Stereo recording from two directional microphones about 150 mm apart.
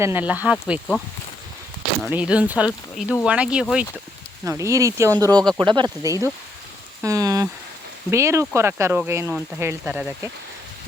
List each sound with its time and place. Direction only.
0.0 s speech: 15° right (ahead or behind)
2.0 s speech: 10° right (ahead or behind)
4.4 s speech: 20° right (ahead or behind)
7.0 s a sound: 20° right (ahead or behind)
8.1 s speech: 20° right (ahead or behind)